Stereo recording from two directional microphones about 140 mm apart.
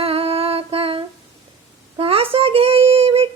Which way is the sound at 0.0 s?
45° right (ahead or behind).